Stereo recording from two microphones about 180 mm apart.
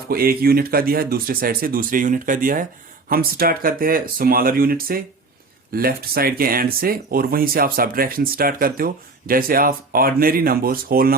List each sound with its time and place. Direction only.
0.1 s speech: 55° right (ahead or behind)